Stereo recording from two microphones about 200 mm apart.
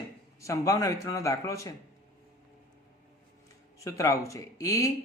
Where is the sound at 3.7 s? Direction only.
15° left (ahead or behind).